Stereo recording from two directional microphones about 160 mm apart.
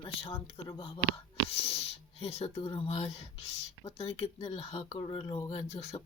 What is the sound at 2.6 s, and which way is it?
Speech, 35° left (ahead or behind).